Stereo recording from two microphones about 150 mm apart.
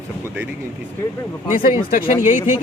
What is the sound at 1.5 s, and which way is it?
Speech, 70° left (ahead or behind).